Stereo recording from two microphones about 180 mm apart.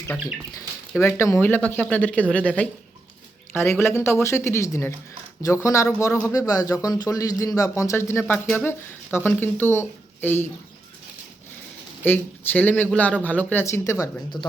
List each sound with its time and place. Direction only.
0.9 s speech: 10° left (ahead or behind)
3.5 s speech: 15° left (ahead or behind)
12.0 s speech: 10° left (ahead or behind)